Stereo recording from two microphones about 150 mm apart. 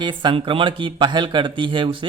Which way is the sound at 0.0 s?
30° right (ahead or behind).